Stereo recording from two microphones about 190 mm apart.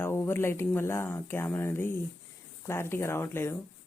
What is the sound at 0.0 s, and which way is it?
Speech, 10° left (ahead or behind).